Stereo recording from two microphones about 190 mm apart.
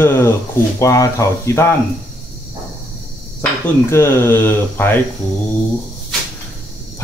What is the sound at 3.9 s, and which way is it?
Speech, 15° left (ahead or behind).